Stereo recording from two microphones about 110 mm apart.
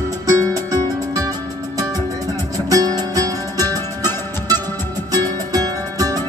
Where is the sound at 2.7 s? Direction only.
30° right (ahead or behind).